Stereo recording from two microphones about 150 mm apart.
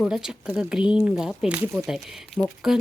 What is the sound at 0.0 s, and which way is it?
Speech, 5° right (ahead or behind).